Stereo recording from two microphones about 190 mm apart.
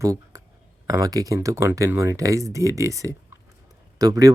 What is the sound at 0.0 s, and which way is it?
Speech, 15° right (ahead or behind).